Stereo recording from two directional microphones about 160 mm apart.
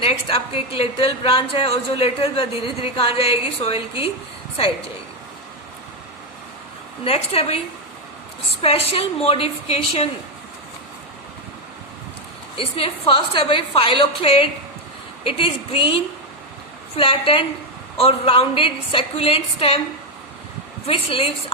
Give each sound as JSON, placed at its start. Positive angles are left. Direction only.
{"t": 0.0, "sound": "speech", "side_deg": 35}
{"t": 7.0, "sound": "speech", "side_deg": 35}
{"t": 8.6, "sound": "speech", "side_deg": 40}
{"t": 12.5, "sound": "speech", "side_deg": 35}
{"t": 17.0, "sound": "speech", "side_deg": 35}
{"t": 20.8, "sound": "speech", "side_deg": 35}